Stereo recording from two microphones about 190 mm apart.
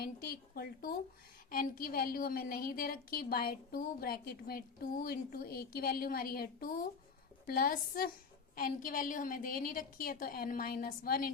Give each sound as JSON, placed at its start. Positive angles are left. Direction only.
{"t": 0.0, "sound": "a woman's voice", "side_deg": 55}